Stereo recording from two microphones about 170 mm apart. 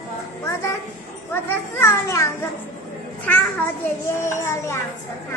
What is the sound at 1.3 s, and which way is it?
Children playing, 15° left (ahead or behind).